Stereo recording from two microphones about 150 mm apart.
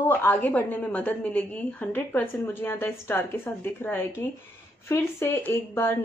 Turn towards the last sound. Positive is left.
turn(degrees=15)  # may be behind; listen again after turning